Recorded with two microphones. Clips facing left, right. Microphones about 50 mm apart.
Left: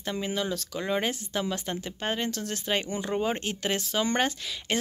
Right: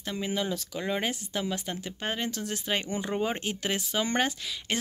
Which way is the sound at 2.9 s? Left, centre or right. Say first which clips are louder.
Left 1 dB; centre.